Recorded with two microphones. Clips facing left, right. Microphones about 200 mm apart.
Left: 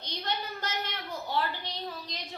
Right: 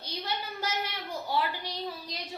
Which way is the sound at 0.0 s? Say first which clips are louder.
Left 1 dB; 10° right (ahead or behind).